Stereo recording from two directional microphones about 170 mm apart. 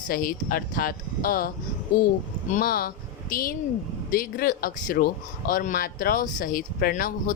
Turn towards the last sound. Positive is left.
turn(degrees=55)  # may be behind; listen again after turning